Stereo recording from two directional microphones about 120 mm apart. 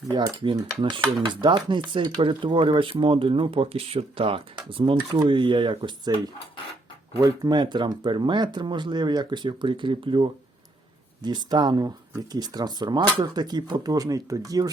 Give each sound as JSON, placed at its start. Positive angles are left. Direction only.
{"t": 0.2, "sound": "speech", "side_deg": -40}